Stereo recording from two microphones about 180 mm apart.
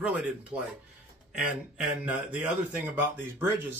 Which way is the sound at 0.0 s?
5° right (ahead or behind).